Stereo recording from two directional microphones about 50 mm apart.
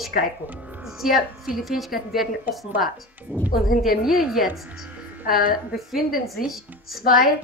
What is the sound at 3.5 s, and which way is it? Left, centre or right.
Speech, centre.